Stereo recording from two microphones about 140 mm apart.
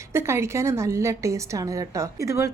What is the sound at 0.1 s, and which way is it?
A woman's voice, 20° right (ahead or behind).